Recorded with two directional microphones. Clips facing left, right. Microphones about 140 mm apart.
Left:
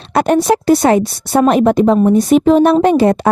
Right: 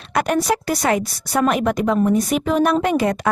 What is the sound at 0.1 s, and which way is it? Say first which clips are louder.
A woman's voice: left 7 dB; 30° left (ahead or behind).